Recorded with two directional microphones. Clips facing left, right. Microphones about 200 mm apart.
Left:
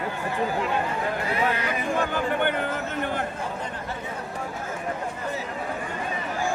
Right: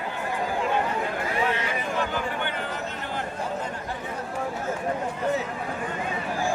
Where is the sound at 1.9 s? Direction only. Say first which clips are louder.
Left 5 dB; 55° left (ahead or behind).